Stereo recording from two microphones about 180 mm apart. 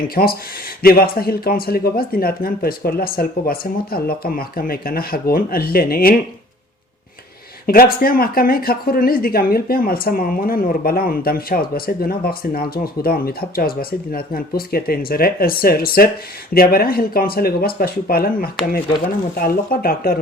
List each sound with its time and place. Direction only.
0.1 s speech: 55° left (ahead or behind)
7.7 s speech: 55° left (ahead or behind)